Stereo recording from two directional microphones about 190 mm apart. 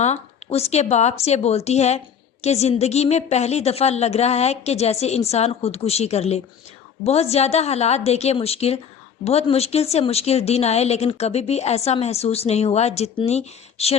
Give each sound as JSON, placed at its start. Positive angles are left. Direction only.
{"t": 0.0, "sound": "a woman's voice", "side_deg": 35}